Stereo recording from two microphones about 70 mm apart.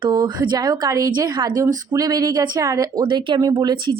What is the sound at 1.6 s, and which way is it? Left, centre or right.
Speech, right.